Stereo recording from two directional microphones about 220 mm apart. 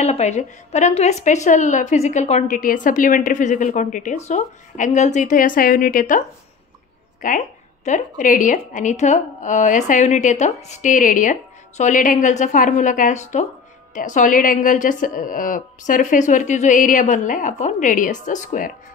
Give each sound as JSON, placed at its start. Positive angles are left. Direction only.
{"t": 0.0, "sound": "speech", "side_deg": 30}